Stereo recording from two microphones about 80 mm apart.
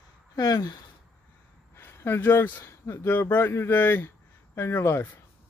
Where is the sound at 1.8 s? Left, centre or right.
Left.